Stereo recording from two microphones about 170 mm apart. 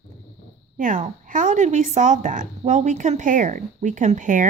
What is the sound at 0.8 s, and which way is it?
Speech, 50° right (ahead or behind).